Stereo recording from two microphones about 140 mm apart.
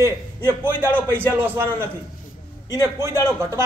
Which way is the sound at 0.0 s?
15° right (ahead or behind).